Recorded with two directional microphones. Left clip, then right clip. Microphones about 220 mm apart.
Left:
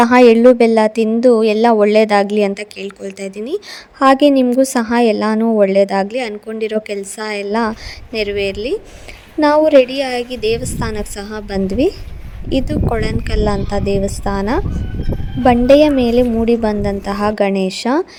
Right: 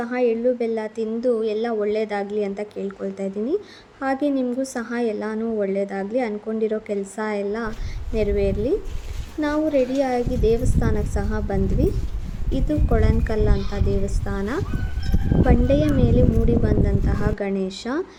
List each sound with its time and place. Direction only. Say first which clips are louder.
0.0 s a woman's voice: left 13 dB; 45° left (ahead or behind)